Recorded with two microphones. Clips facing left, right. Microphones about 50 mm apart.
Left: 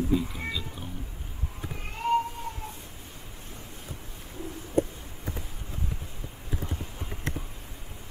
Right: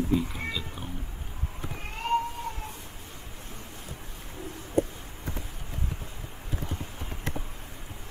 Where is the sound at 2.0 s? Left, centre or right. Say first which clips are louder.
Left 2 dB; right.